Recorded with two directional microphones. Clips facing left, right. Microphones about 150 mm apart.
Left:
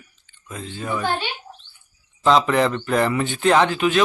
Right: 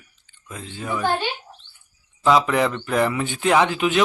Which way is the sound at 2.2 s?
5° right (ahead or behind).